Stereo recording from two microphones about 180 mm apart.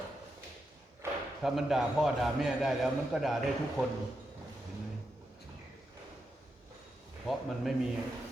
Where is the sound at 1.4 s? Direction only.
Centre (ahead or behind).